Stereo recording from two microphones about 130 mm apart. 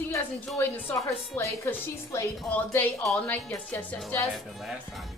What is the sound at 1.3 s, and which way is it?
A woman's voice, 20° left (ahead or behind).